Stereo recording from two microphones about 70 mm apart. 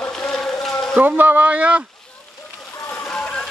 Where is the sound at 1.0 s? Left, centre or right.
Right.